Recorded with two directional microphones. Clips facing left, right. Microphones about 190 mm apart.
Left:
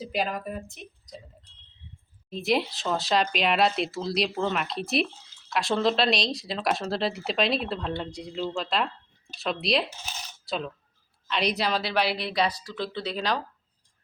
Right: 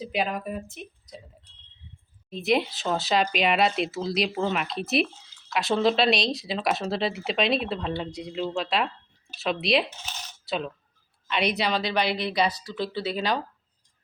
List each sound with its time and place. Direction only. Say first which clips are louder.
0.0 s speech: right 1 dB; centre (ahead or behind)
2.4 s speech: right 2 dB; centre (ahead or behind)